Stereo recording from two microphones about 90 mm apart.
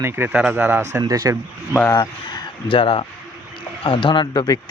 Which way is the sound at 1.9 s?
50° left (ahead or behind).